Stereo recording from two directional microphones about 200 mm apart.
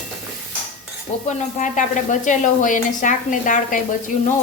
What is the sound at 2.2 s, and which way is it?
A woman's voice, 40° left (ahead or behind).